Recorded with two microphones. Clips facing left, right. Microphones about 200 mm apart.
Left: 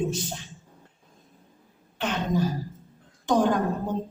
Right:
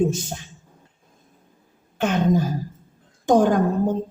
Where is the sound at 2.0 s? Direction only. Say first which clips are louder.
Right 6 dB; 45° right (ahead or behind).